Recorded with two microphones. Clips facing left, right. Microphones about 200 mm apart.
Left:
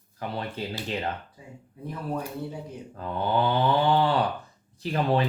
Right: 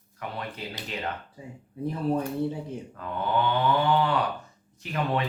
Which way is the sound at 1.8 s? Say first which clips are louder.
Right 5 dB; 30° right (ahead or behind).